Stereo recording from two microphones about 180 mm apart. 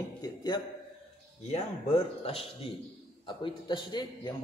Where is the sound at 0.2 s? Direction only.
20° left (ahead or behind).